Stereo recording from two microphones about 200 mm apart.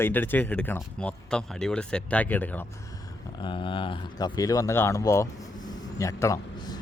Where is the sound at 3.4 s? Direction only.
25° left (ahead or behind).